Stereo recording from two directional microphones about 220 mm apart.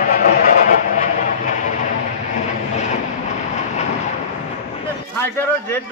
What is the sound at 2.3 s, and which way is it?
Vehicle, 30° left (ahead or behind).